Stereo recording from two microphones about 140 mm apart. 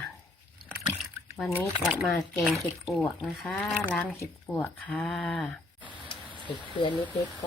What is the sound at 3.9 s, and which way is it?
Speech, 10° left (ahead or behind).